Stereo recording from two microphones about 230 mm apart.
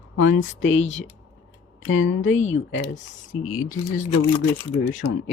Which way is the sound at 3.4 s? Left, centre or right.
Left.